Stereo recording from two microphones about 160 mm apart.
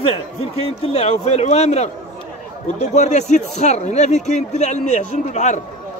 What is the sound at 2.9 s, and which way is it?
A man's voice, 45° left (ahead or behind).